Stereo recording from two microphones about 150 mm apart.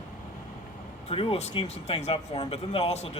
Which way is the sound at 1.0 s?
40° left (ahead or behind).